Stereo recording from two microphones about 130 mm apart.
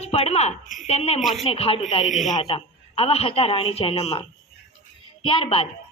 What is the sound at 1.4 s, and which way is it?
A woman's voice, 50° left (ahead or behind).